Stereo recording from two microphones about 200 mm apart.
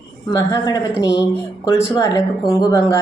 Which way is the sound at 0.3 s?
20° left (ahead or behind).